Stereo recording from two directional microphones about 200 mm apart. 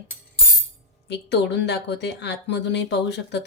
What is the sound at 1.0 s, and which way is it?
Speech, 60° left (ahead or behind).